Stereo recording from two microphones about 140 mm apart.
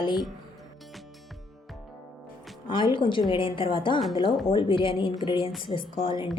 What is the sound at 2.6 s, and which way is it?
Speech, 35° left (ahead or behind).